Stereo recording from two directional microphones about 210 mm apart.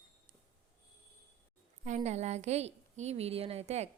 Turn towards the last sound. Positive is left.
turn(degrees=-30)  # may be behind; listen again after turning